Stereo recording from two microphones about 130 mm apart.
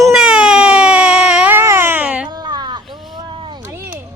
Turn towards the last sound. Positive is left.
turn(degrees=-15)  # may be behind; listen again after turning